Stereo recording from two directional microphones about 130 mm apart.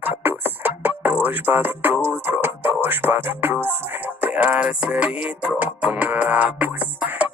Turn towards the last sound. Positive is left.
turn(degrees=-10)  # may be behind; listen again after turning